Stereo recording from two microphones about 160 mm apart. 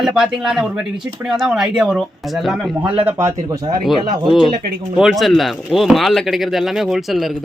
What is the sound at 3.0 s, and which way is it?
Speech, 15° right (ahead or behind).